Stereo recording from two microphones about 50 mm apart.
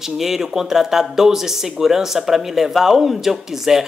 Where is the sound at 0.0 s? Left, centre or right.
Centre.